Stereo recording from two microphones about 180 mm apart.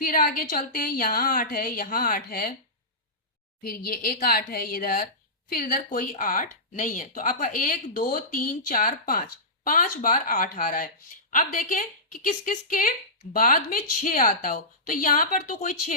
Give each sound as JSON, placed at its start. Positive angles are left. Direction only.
{"t": 0.0, "sound": "speech", "side_deg": 50}
{"t": 3.6, "sound": "speech", "side_deg": 55}